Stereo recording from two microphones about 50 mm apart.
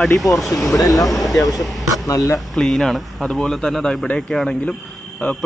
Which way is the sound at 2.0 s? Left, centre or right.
Left.